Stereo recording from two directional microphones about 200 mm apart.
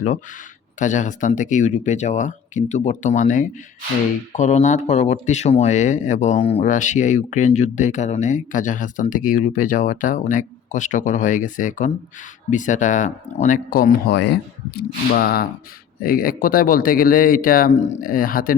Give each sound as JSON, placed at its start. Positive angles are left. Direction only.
{"t": 0.8, "sound": "speech", "side_deg": 40}